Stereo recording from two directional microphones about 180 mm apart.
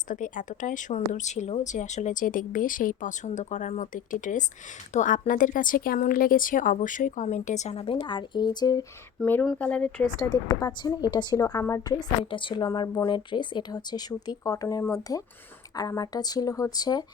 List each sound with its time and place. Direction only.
0.1 s speech: 45° left (ahead or behind); by 8.8 s 20° left (ahead or behind)
9.2 s speech: 10° left (ahead or behind)
10.2 s speech: 20° left (ahead or behind)